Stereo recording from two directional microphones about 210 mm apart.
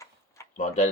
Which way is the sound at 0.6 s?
35° left (ahead or behind).